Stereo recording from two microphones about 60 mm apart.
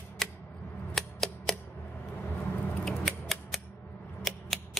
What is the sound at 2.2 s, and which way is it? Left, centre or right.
Vehicle, left.